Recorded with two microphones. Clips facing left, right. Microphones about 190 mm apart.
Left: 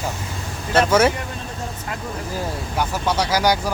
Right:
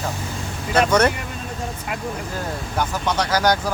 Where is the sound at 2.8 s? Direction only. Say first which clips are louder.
Left 1 dB; 10° left (ahead or behind).